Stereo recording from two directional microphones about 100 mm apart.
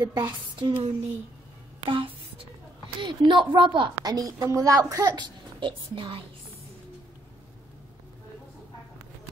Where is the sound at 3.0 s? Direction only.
55° right (ahead or behind).